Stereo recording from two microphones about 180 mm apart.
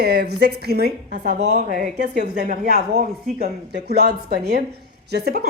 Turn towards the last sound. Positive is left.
turn(degrees=-60)  # may be behind; listen again after turning